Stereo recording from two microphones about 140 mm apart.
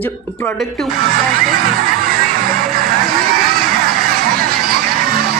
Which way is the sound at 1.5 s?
90° right.